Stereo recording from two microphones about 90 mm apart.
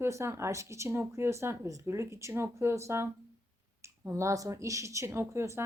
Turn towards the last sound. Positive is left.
turn(degrees=-30)  # may be behind; listen again after turning